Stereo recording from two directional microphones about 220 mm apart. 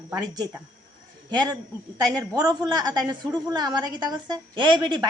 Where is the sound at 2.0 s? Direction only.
20° right (ahead or behind).